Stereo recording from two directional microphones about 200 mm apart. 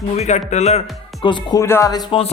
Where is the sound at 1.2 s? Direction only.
20° left (ahead or behind).